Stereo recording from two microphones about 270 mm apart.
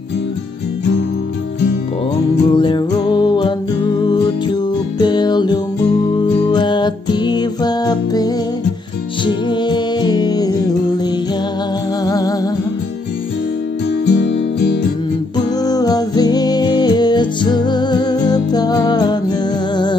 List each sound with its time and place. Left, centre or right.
2.5 s music: centre
12.0 s music: centre
14.0 s music: left
15.6 s music: centre